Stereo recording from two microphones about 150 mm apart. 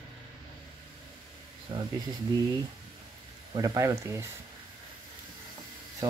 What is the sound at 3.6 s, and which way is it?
Speech, 25° right (ahead or behind).